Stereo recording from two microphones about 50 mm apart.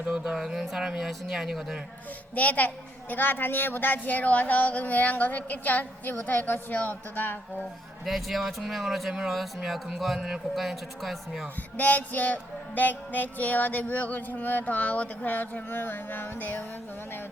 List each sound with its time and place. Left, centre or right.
0.3 s speech: centre
2.3 s a woman's voice: left
8.0 s speech: centre
10.2 s speech: centre
10.5 s speech: centre
11.8 s a woman's voice: left